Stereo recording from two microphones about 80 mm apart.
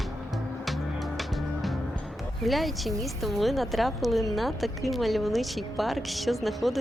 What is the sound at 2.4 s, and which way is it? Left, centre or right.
A woman's voice, centre.